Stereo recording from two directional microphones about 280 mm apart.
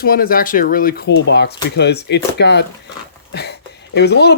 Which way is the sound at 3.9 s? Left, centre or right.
Left.